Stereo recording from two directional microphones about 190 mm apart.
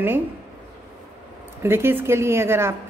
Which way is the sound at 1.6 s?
10° right (ahead or behind).